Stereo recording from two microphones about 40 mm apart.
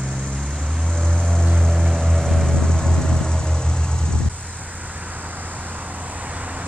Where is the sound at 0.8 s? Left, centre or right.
Centre.